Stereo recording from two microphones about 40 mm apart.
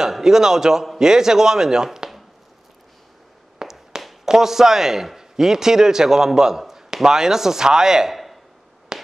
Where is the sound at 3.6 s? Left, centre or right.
Centre.